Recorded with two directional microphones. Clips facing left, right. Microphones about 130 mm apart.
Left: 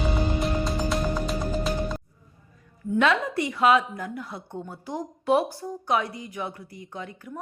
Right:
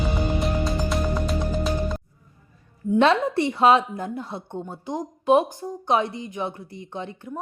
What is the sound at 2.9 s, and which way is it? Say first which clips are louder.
A woman's voice: right 4 dB; 30° right (ahead or behind).